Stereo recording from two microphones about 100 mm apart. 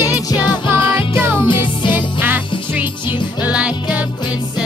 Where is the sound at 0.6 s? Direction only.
55° left (ahead or behind).